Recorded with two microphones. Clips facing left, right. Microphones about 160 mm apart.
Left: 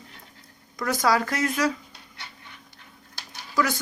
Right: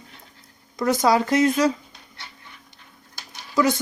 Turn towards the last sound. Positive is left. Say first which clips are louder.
# right 5 dB
turn(degrees=-20)  # may be behind; listen again after turning